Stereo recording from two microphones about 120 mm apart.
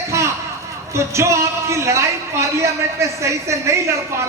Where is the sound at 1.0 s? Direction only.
25° right (ahead or behind).